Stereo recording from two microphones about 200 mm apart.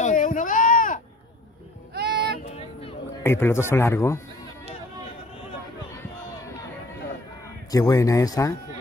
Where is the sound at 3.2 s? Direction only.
10° left (ahead or behind).